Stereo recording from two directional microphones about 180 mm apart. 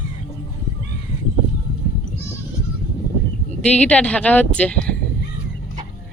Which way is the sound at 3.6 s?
5° left (ahead or behind).